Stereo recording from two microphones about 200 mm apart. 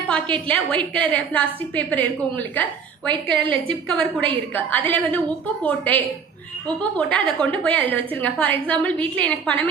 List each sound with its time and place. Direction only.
0.3 s a woman's voice: 5° left (ahead or behind)
3.1 s a woman's voice: 25° right (ahead or behind)
3.5 s a woman's voice: 5° left (ahead or behind)